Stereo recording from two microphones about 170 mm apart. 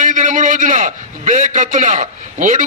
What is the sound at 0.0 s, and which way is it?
A man's voice, 50° right (ahead or behind).